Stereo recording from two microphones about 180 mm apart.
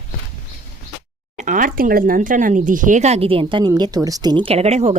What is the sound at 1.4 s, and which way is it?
A woman's voice, 45° right (ahead or behind).